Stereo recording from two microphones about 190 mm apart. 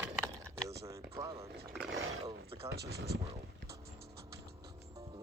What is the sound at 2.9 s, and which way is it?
Speech, 60° right (ahead or behind).